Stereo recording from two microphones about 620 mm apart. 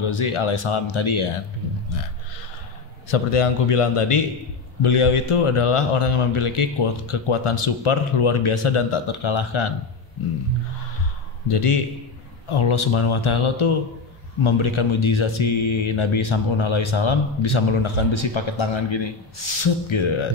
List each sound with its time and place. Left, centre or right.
0.0 s speech: left
3.1 s a man's voice: left
11.4 s a man's voice: left